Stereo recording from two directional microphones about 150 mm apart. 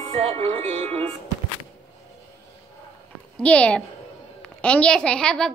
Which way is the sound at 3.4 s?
10° left (ahead or behind).